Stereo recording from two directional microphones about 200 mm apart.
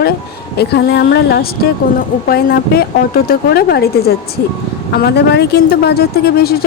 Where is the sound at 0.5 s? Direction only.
55° left (ahead or behind).